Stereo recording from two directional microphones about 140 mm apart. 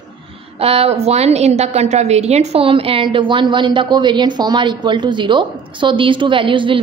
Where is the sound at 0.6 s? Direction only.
45° right (ahead or behind).